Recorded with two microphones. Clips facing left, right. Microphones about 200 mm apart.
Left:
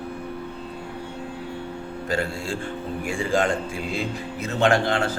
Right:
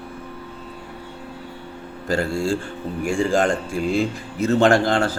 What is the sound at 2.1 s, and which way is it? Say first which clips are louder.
A man's voice: right 6 dB; 40° right (ahead or behind).